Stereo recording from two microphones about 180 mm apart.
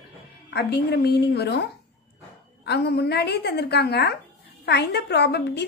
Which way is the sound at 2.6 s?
65° left (ahead or behind).